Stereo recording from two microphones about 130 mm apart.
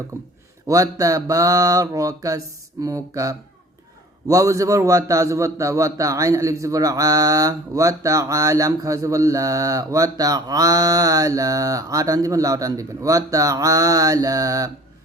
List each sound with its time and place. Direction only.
0.1 s a man's voice: 25° right (ahead or behind)